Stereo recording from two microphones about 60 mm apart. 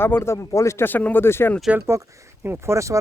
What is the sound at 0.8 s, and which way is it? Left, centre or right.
Speech, left.